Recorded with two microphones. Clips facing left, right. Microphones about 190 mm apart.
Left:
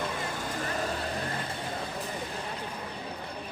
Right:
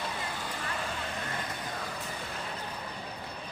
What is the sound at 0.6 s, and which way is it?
Vehicle, 40° left (ahead or behind).